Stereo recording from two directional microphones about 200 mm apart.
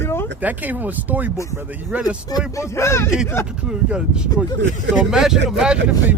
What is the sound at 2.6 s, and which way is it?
Speech, 15° left (ahead or behind).